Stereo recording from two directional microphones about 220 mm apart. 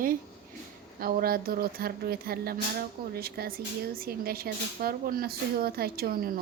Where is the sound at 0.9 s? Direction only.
40° right (ahead or behind).